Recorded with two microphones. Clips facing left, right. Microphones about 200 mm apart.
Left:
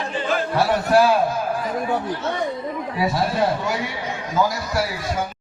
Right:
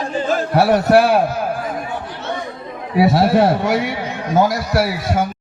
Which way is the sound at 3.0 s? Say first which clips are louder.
Right 8 dB; 70° right (ahead or behind).